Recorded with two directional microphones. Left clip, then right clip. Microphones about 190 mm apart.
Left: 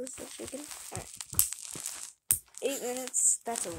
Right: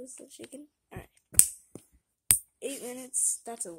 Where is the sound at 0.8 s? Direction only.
40° right (ahead or behind).